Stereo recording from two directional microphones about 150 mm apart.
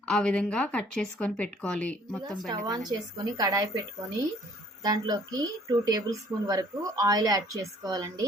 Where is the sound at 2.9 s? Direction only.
30° right (ahead or behind).